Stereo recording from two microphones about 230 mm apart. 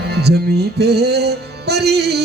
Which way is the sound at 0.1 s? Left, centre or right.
Right.